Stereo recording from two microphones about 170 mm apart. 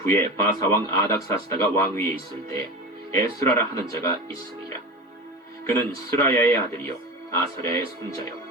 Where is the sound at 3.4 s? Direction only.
15° left (ahead or behind).